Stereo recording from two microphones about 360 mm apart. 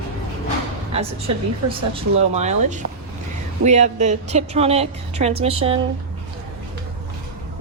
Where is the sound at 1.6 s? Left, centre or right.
Centre.